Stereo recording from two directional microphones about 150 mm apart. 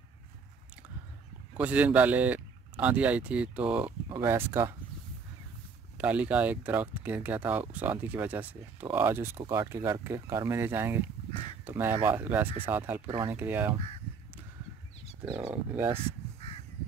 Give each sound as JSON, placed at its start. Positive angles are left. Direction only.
{"t": 1.6, "sound": "speech", "side_deg": -10}
{"t": 5.9, "sound": "speech", "side_deg": -10}
{"t": 13.0, "sound": "speech", "side_deg": -35}
{"t": 13.3, "sound": "speech", "side_deg": -15}
{"t": 15.3, "sound": "speech", "side_deg": -10}